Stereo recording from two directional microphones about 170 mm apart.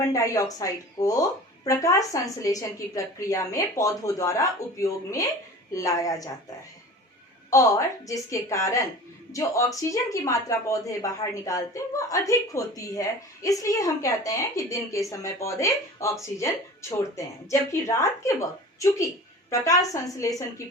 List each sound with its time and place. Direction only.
0.1 s speech: 20° left (ahead or behind)
7.5 s speech: 20° left (ahead or behind)